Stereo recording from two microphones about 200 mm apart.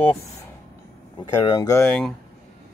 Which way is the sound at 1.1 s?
20° left (ahead or behind).